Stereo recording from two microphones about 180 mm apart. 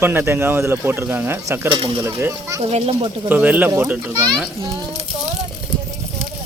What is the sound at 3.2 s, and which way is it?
Speech, 10° right (ahead or behind).